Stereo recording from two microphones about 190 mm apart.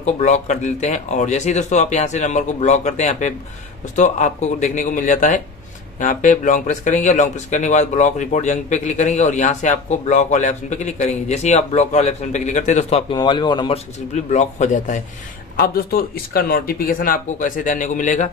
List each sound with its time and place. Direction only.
0.0 s speech: 40° left (ahead or behind)
13.1 s speech: 25° left (ahead or behind)
14.1 s speech: 35° left (ahead or behind)
15.5 s speech: 50° left (ahead or behind)